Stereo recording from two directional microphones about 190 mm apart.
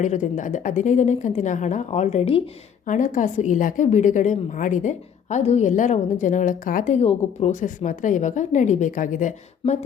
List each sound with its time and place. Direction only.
0.0 s a woman's voice: 40° left (ahead or behind)